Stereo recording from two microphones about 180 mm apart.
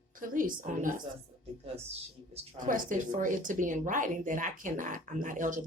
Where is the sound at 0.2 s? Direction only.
50° right (ahead or behind).